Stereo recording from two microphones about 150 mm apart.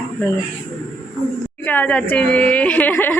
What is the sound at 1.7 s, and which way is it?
A woman's voice, 10° left (ahead or behind).